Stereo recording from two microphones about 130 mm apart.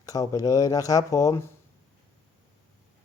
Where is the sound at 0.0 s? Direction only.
25° left (ahead or behind).